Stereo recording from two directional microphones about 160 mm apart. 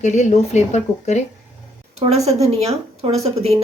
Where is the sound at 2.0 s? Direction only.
45° right (ahead or behind).